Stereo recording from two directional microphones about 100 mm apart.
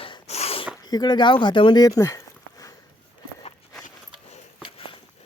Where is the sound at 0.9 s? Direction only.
45° left (ahead or behind).